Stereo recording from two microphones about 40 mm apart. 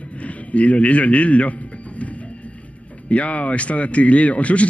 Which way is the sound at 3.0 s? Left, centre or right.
Left.